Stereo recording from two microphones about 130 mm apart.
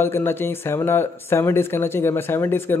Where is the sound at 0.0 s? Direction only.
15° left (ahead or behind).